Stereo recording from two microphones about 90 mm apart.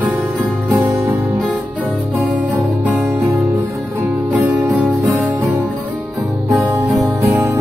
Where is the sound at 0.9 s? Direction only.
40° right (ahead or behind).